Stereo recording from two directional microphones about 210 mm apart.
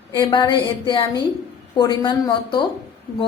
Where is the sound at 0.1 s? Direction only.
20° left (ahead or behind).